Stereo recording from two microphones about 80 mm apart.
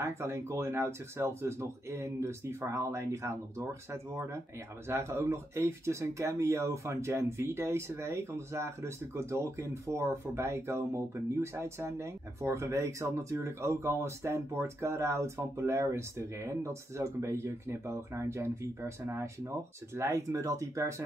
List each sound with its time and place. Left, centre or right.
0.0 s speech: right